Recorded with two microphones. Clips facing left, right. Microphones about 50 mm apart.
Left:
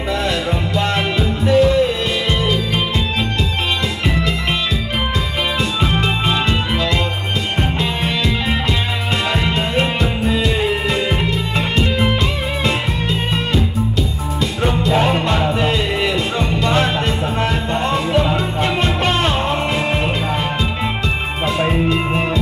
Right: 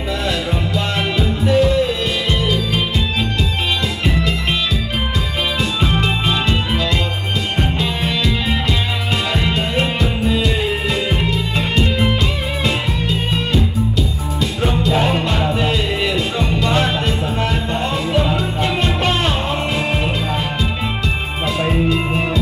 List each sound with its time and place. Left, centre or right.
0.3 s music: left
6.0 s music: left
9.1 s music: left
14.6 s music: left